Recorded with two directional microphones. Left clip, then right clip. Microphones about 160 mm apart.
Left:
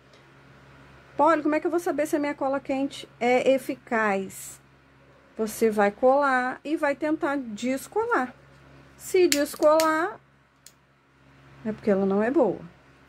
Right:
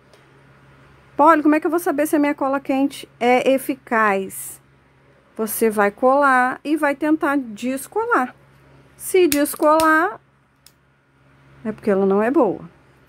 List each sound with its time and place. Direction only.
1.1 s speech: 45° right (ahead or behind)
5.4 s speech: 45° right (ahead or behind)
7.6 s speech: 30° right (ahead or behind)
11.6 s speech: 40° right (ahead or behind)